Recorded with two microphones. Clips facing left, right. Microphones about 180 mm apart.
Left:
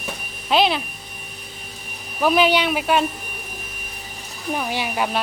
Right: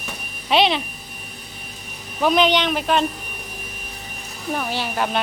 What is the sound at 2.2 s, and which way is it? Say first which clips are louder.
Speech: even; 5° left (ahead or behind).